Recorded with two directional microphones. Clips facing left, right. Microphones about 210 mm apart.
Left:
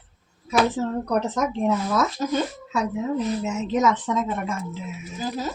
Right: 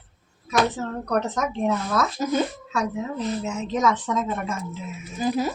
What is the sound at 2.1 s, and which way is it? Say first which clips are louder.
Speech: right 1 dB; 10° right (ahead or behind).